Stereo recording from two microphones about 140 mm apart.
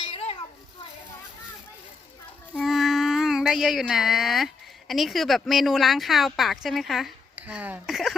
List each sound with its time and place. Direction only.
0.0 s children playing: 40° left (ahead or behind)
2.6 s speech: centre (ahead or behind)
7.3 s speech: 10° right (ahead or behind)